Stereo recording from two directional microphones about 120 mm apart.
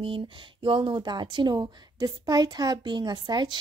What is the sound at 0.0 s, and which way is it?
A woman's voice, 45° right (ahead or behind).